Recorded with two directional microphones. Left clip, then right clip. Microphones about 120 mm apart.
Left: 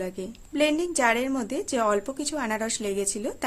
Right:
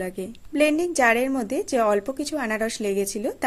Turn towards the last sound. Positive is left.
turn(degrees=-30)  # may be behind; listen again after turning